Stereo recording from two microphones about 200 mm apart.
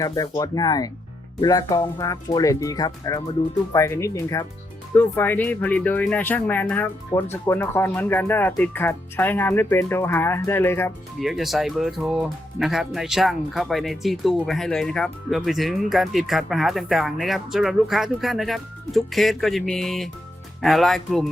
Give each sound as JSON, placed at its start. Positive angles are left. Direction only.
{"t": 0.0, "sound": "speech", "side_deg": 20}
{"t": 11.2, "sound": "speech", "side_deg": 0}